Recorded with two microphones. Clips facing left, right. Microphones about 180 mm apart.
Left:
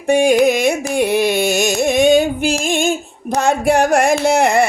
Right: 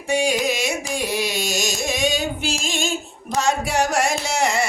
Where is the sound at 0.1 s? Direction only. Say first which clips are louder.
Left 9 dB; 55° left (ahead or behind).